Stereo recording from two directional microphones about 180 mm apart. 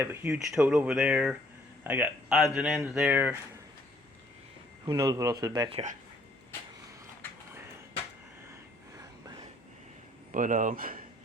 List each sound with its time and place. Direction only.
0.0 s speech: 10° right (ahead or behind)
4.9 s speech: 20° right (ahead or behind); by 6.0 s 35° right (ahead or behind)
10.3 s speech: 45° right (ahead or behind)